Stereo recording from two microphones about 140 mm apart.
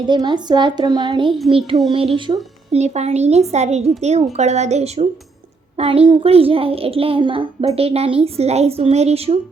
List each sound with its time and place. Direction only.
0.1 s a woman's voice: 30° right (ahead or behind)
2.7 s a woman's voice: 55° right (ahead or behind)